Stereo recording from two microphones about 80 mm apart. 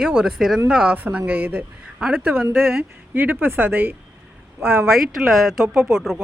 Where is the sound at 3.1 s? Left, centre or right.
Right.